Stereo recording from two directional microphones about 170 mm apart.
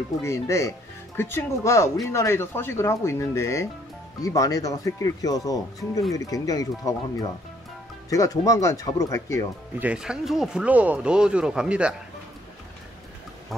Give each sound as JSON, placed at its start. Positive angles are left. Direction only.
{"t": 0.2, "sound": "speech", "side_deg": 15}
{"t": 9.8, "sound": "speech", "side_deg": -5}